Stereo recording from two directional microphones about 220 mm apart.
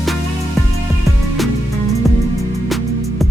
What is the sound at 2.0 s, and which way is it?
Music, centre (ahead or behind).